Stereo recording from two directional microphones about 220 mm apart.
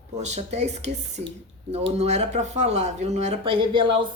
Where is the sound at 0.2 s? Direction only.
30° right (ahead or behind).